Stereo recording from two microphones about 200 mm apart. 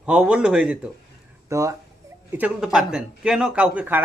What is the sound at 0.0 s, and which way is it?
Speech, 5° right (ahead or behind).